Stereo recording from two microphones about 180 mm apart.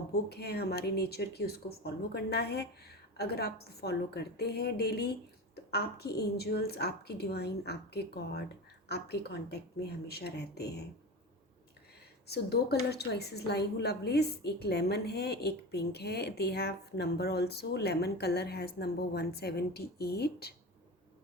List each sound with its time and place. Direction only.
0.1 s a woman's voice: 65° left (ahead or behind)
12.3 s a woman's voice: 65° left (ahead or behind)